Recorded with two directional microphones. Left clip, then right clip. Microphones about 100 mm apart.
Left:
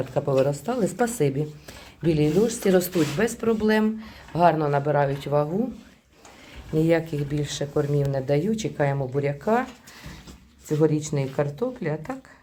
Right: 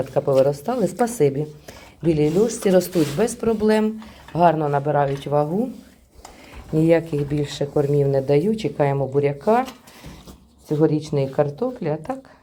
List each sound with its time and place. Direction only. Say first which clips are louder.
0.0 s speech: right 5 dB; 15° right (ahead or behind)
2.5 s speech: right 4 dB; 20° right (ahead or behind)
3.2 s speech: right 3 dB; 40° right (ahead or behind)
3.8 s speech: right 2 dB; 20° right (ahead or behind)
6.7 s speech: right 4 dB; 55° right (ahead or behind); by 9.6 s 35° right (ahead or behind)
10.7 s speech: right 3 dB; 35° right (ahead or behind)